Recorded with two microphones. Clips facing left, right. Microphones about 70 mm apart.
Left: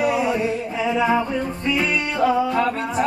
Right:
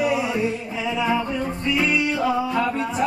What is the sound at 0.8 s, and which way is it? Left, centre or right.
Music, left.